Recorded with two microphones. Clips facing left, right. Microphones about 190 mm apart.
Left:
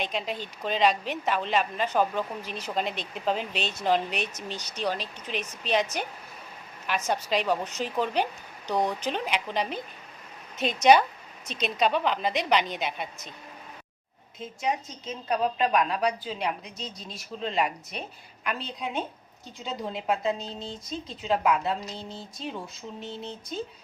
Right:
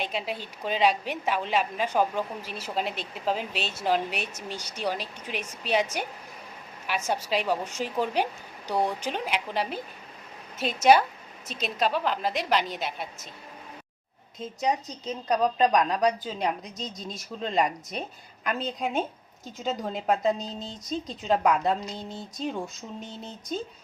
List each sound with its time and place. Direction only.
0.0 s a woman's voice: 5° right (ahead or behind)
14.3 s a woman's voice: 35° right (ahead or behind)